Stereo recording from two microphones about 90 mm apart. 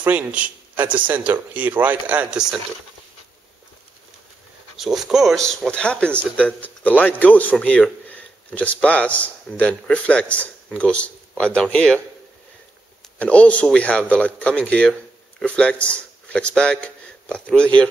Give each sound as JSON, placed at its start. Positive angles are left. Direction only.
{"t": 0.0, "sound": "a man's voice", "side_deg": -20}
{"t": 4.7, "sound": "speech", "side_deg": -5}
{"t": 13.2, "sound": "a man's voice", "side_deg": 15}